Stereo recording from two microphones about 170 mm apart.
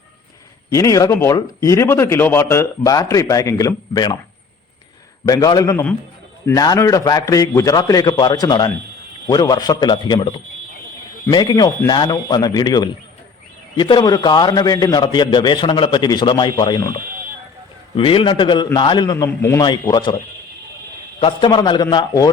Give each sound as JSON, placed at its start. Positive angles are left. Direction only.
{"t": 0.7, "sound": "speech", "side_deg": 20}
{"t": 5.2, "sound": "speech", "side_deg": 20}
{"t": 21.2, "sound": "speech", "side_deg": 30}